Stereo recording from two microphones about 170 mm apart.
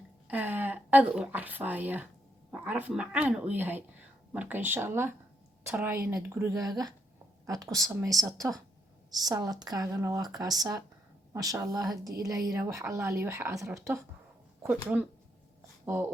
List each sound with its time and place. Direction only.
0.3 s a woman's voice: 10° right (ahead or behind)